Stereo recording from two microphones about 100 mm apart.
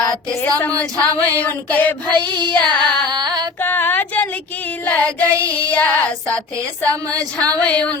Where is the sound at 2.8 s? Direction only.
45° right (ahead or behind).